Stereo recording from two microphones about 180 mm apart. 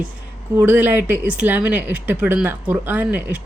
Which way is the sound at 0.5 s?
10° right (ahead or behind).